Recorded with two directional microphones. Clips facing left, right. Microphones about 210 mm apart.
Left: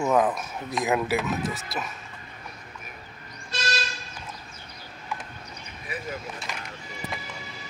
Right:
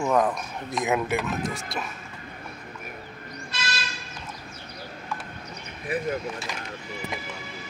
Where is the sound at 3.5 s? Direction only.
40° left (ahead or behind).